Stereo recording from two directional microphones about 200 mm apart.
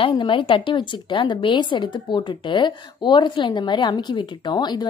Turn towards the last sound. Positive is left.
turn(degrees=20)  # may be behind; listen again after turning